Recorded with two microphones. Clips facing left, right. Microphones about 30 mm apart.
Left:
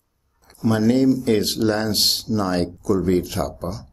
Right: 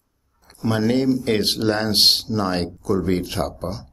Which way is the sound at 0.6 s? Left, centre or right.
Right.